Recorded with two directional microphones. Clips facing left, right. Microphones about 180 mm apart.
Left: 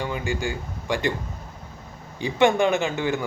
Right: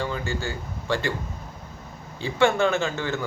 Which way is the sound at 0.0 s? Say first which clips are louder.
Left 1 dB; 15° left (ahead or behind).